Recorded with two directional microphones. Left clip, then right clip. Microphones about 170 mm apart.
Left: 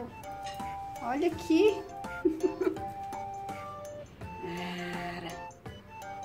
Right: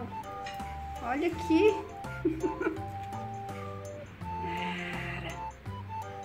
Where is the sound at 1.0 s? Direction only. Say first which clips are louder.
Even; 15° left (ahead or behind).